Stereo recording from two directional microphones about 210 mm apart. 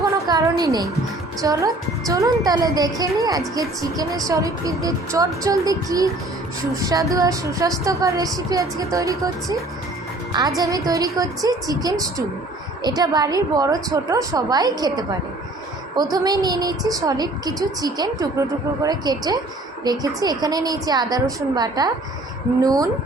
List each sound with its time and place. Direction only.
0.3 s a sound: 15° right (ahead or behind)
1.4 s speech: 15° right (ahead or behind)
16.1 s a woman's voice: 20° right (ahead or behind)